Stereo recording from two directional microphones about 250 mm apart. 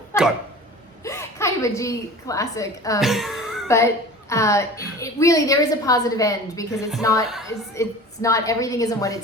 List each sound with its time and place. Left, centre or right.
1.0 s a woman's voice: centre
3.0 s speech: centre
3.7 s a woman's voice: centre